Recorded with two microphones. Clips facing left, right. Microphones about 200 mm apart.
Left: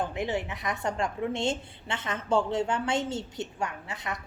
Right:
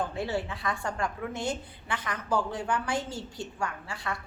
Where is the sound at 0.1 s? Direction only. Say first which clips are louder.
Left 1 dB; 15° left (ahead or behind).